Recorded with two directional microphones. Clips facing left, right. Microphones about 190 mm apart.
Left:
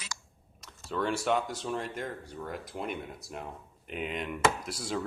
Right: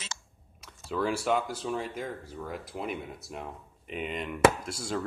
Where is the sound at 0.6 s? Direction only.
5° right (ahead or behind).